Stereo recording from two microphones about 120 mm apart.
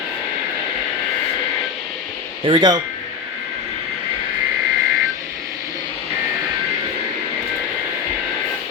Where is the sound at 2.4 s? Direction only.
35° right (ahead or behind).